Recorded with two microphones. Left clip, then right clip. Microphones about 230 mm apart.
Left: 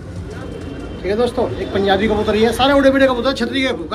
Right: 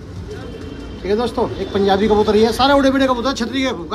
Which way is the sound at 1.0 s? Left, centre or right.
Right.